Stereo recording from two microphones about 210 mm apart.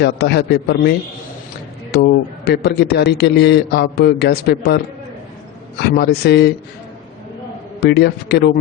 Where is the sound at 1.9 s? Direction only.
50° left (ahead or behind).